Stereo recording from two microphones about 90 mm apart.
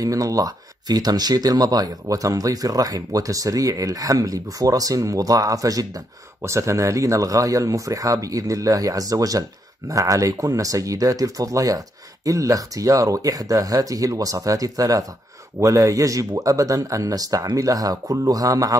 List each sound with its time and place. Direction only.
0.0 s speech: 40° right (ahead or behind)